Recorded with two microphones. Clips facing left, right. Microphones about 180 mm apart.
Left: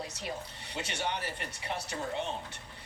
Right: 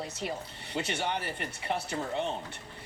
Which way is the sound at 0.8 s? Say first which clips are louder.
Right 4 dB; 60° right (ahead or behind).